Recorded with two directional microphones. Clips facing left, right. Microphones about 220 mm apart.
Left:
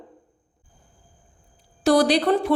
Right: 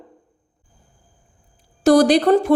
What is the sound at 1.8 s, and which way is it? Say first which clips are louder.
Speech: right 5 dB; 45° right (ahead or behind).